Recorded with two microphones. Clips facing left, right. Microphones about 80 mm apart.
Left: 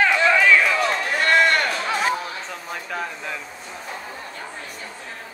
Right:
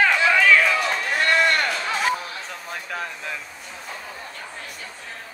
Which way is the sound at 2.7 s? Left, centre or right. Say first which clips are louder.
Left 2 dB; centre.